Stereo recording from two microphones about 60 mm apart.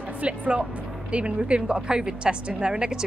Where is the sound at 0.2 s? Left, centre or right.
Centre.